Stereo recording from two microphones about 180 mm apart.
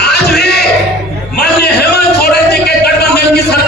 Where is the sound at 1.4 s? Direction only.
65° left (ahead or behind).